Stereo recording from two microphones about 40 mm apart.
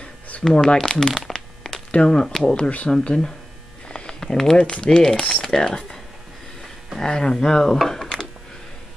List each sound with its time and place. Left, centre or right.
0.4 s speech: centre
1.3 s a sound: centre
2.0 s speech: centre
2.9 s speech: left
3.9 s a sound: left
4.2 s speech: centre
7.0 s speech: centre